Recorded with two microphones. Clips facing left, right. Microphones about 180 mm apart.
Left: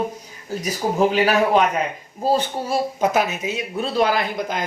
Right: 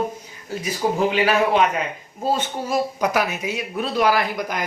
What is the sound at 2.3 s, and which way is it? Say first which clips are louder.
Speech: left 1 dB; 30° left (ahead or behind).